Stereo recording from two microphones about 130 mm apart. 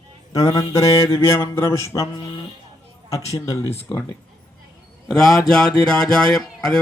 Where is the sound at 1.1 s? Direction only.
20° left (ahead or behind).